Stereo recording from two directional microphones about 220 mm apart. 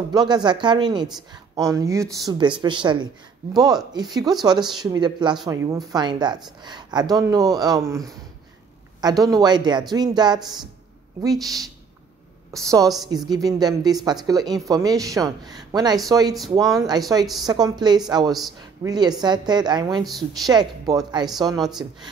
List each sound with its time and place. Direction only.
0.1 s speech: 20° right (ahead or behind)
9.1 s speech: centre (ahead or behind)
9.4 s speech: 20° right (ahead or behind)
11.3 s speech: centre (ahead or behind)
12.6 s speech: 15° right (ahead or behind)